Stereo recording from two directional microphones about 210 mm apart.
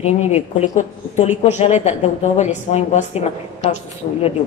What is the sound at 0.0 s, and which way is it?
A woman's voice, 30° left (ahead or behind).